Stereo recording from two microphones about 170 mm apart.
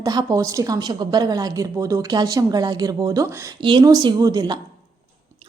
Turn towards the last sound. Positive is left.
turn(degrees=-25)  # may be behind; listen again after turning